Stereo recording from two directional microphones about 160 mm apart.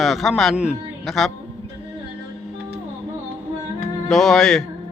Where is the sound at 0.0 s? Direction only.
Centre (ahead or behind).